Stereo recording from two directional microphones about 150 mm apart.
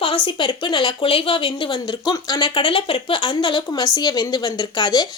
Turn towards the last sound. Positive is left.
turn(degrees=30)  # may be behind; listen again after turning